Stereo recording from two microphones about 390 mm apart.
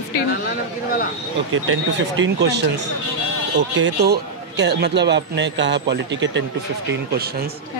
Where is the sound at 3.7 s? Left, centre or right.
Right.